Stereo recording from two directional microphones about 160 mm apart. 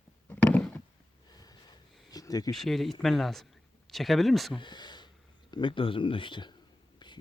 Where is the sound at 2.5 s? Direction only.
Centre (ahead or behind).